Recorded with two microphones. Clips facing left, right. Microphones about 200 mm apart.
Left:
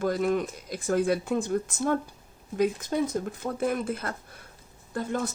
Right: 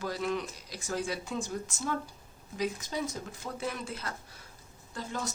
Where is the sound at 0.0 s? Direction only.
50° left (ahead or behind).